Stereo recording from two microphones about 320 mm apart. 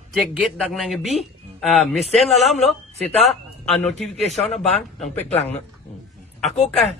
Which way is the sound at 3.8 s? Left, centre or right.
Centre.